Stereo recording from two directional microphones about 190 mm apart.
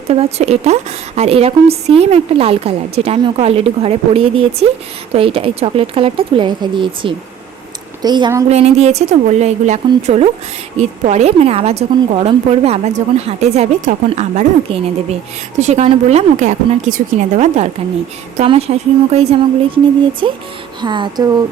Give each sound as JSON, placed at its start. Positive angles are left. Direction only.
{"t": 0.1, "sound": "a woman's voice", "side_deg": -35}
{"t": 8.4, "sound": "a woman's voice", "side_deg": -35}